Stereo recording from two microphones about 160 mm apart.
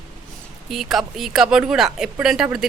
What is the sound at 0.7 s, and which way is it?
A woman's voice, centre (ahead or behind).